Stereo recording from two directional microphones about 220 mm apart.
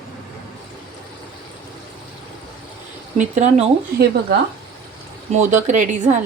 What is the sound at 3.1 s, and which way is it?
Speech, 35° right (ahead or behind).